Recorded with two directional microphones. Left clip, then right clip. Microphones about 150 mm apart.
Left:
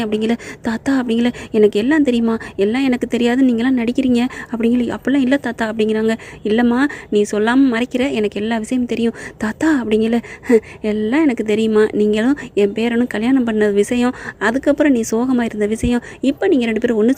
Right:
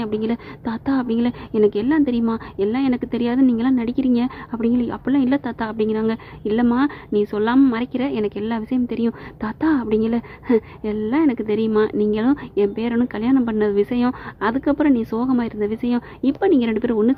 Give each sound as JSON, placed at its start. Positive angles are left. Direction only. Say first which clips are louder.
{"t": 0.0, "sound": "a woman's voice", "louder": "left 5 dB", "side_deg": 15}